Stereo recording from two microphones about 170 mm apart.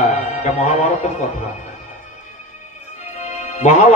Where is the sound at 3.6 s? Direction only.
45° left (ahead or behind).